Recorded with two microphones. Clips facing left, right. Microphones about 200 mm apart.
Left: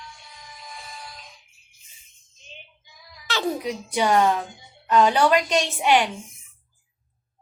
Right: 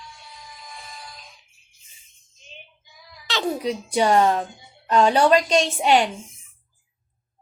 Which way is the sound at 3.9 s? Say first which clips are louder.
Right 2 dB; 30° right (ahead or behind).